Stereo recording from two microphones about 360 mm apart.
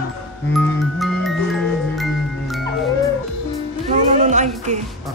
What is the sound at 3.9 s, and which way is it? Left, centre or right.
Music, centre.